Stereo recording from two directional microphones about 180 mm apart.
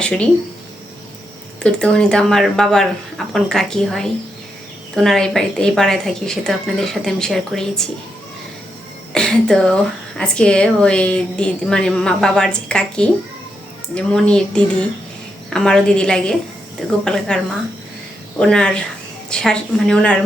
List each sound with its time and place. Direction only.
1.6 s a woman's voice: 5° left (ahead or behind)
9.1 s a woman's voice: 5° left (ahead or behind)